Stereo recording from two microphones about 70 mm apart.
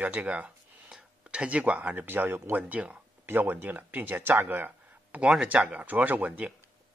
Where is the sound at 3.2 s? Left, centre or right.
Right.